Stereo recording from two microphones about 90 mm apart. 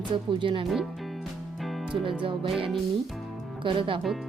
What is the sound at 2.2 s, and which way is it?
Speech, 70° right (ahead or behind).